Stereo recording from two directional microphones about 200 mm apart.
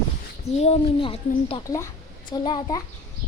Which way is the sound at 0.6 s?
30° left (ahead or behind).